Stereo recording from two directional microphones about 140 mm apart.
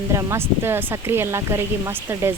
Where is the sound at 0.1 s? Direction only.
20° right (ahead or behind).